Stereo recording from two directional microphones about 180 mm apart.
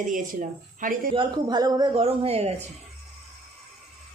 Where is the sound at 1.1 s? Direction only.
25° right (ahead or behind).